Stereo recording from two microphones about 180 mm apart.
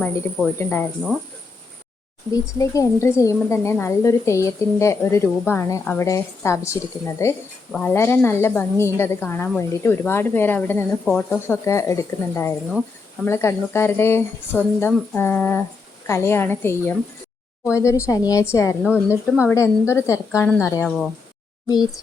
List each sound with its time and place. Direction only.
0.0 s a woman's voice: 5° left (ahead or behind)
2.3 s a woman's voice: 20° left (ahead or behind)
18.8 s a woman's voice: centre (ahead or behind)
19.0 s a woman's voice: 15° left (ahead or behind)